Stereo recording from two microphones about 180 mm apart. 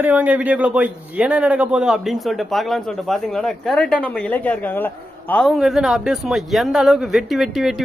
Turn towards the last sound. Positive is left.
turn(degrees=0)  # may be behind; listen again after turning